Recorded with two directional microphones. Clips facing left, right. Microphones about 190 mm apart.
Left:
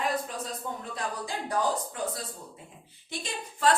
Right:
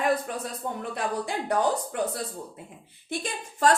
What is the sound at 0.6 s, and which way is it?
Speech, 60° right (ahead or behind).